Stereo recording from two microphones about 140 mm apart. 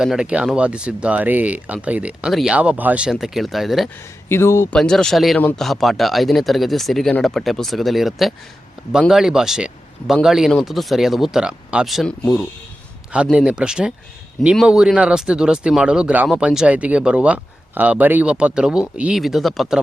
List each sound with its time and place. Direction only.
0.0 s speech: 5° right (ahead or behind)
4.3 s speech: 20° left (ahead or behind)
4.7 s speech: 5° left (ahead or behind)